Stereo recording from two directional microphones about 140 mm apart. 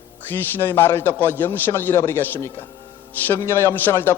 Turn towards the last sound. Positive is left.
turn(degrees=15)  # may be behind; listen again after turning